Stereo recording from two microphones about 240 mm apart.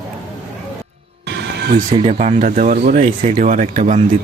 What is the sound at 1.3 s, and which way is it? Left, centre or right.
Music, right.